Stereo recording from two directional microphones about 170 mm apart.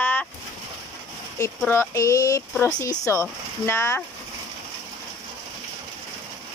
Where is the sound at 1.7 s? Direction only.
15° left (ahead or behind).